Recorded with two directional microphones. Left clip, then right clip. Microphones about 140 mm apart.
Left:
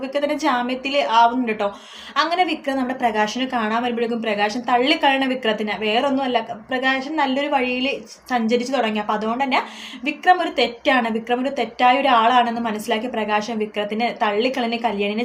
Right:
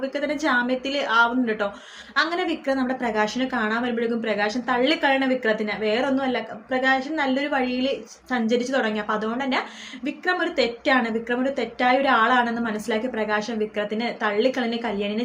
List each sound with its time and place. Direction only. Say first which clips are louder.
0.1 s a woman's voice: left 5 dB; 15° left (ahead or behind)